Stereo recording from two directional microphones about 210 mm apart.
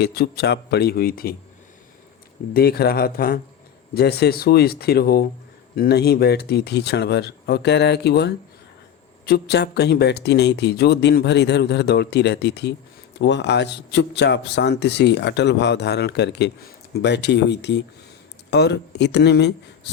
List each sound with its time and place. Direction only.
0.0 s speech: 50° left (ahead or behind)
2.5 s speech: 45° left (ahead or behind)